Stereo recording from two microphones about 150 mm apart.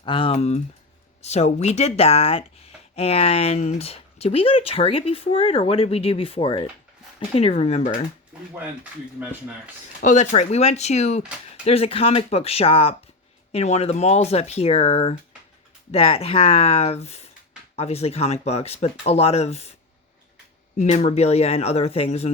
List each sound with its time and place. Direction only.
0.0 s speech: 35° left (ahead or behind)
8.5 s speech: 10° right (ahead or behind)
10.0 s speech: 55° left (ahead or behind)
11.2 s speech: 5° right (ahead or behind)
11.6 s speech: 40° left (ahead or behind)
20.7 s speech: 45° left (ahead or behind)